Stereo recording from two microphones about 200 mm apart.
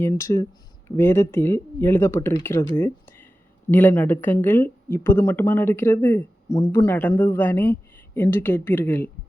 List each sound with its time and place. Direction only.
0.1 s speech: 15° left (ahead or behind)
2.7 s a sound: 10° left (ahead or behind)
3.7 s speech: 10° left (ahead or behind)